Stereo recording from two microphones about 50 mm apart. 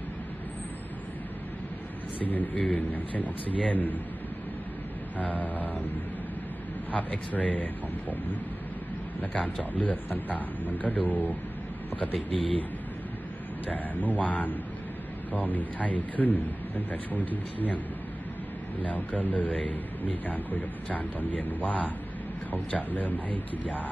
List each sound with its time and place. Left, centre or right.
2.2 s a man's voice: left
5.2 s a man's voice: left
6.9 s a man's voice: left
13.7 s a man's voice: left
18.8 s a man's voice: left